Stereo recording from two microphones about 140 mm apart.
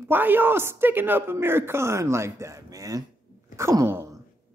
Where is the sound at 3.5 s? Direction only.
20° right (ahead or behind).